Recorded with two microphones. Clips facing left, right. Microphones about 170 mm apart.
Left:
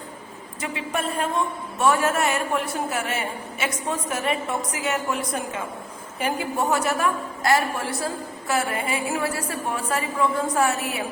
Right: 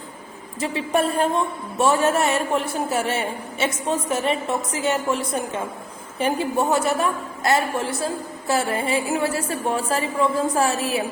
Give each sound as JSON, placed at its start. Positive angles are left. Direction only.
{"t": 0.6, "sound": "a woman's voice", "side_deg": -35}